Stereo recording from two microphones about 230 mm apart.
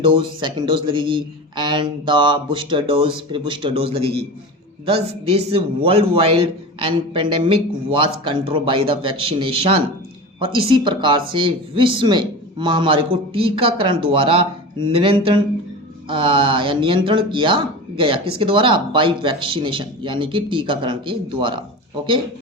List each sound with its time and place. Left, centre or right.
0.0 s speech: right
5.3 s speech: right